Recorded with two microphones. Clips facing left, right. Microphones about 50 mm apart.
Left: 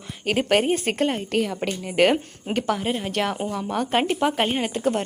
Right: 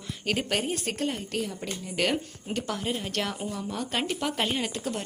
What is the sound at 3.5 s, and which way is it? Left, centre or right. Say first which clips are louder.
Speech: left 7 dB; left.